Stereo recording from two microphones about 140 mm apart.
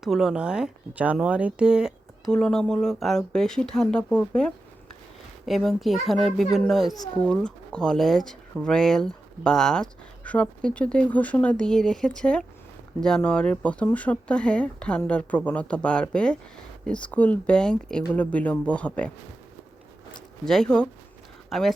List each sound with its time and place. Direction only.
0.0 s speech: centre (ahead or behind)
6.9 s speech: 25° left (ahead or behind)
7.3 s speech: 5° left (ahead or behind)
20.4 s speech: 5° left (ahead or behind)